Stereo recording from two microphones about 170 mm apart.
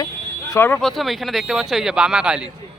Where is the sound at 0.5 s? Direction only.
10° left (ahead or behind).